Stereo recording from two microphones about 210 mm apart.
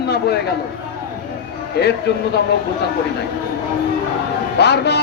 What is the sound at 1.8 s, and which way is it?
Speech, 50° left (ahead or behind).